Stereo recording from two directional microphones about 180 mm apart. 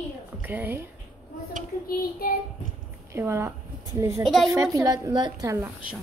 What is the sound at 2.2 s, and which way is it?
Child singing, 55° left (ahead or behind).